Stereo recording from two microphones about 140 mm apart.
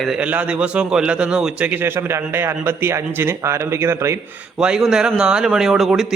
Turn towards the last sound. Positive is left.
turn(degrees=0)  # may be behind; listen again after turning